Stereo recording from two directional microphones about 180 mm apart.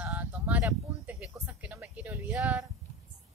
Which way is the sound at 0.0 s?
10° right (ahead or behind).